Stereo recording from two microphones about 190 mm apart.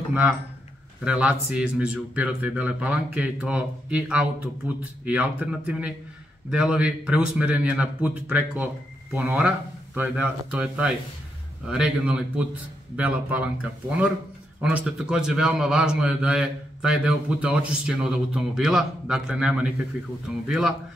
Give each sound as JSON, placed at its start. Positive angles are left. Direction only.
{"t": 1.0, "sound": "a man's voice", "side_deg": -5}